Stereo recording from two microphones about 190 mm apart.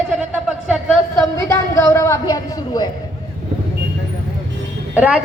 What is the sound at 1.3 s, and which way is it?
Speech, 15° left (ahead or behind).